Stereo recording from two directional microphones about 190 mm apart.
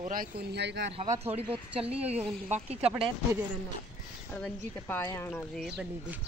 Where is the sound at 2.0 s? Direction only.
5° right (ahead or behind).